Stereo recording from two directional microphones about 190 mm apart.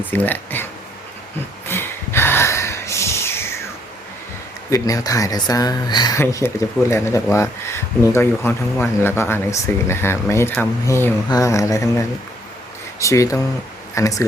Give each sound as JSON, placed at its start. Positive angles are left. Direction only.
{"t": 0.0, "sound": "speech", "side_deg": 10}
{"t": 1.6, "sound": "gasp", "side_deg": 10}
{"t": 4.7, "sound": "speech", "side_deg": 20}